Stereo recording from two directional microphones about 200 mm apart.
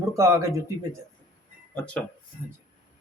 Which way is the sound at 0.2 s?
15° right (ahead or behind).